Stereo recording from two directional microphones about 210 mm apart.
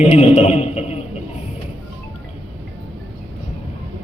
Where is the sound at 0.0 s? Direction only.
30° left (ahead or behind).